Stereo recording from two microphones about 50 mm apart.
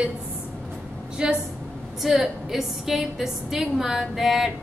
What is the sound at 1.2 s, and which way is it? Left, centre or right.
Speech, centre.